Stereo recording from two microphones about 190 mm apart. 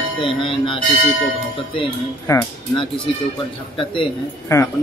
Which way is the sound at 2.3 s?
15° left (ahead or behind).